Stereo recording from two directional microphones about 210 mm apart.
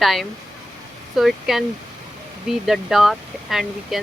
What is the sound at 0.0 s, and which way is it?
Speech, centre (ahead or behind).